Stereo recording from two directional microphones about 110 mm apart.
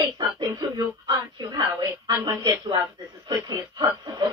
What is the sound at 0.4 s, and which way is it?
Speech, 40° right (ahead or behind).